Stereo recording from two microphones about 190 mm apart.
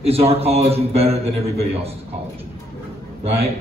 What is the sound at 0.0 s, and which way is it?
A man's voice, 30° right (ahead or behind).